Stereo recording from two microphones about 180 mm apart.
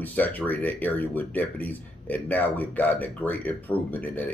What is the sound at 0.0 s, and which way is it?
Speech, 10° left (ahead or behind).